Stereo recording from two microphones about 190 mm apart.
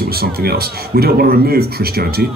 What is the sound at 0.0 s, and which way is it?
A man's voice, 55° right (ahead or behind).